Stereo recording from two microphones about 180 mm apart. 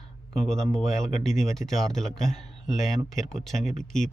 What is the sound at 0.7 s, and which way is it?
Speech, centre (ahead or behind).